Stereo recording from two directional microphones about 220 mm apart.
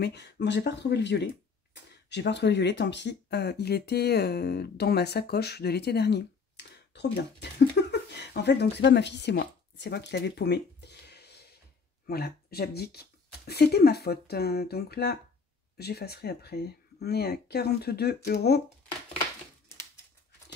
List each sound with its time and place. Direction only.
0.0 s speech: 50° left (ahead or behind)